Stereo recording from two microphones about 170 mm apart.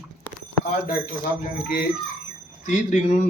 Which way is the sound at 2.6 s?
45° left (ahead or behind).